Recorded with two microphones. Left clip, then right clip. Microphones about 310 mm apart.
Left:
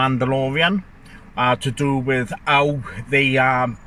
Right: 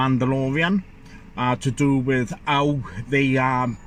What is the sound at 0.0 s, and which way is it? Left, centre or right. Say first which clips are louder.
Speech: left 3 dB; left.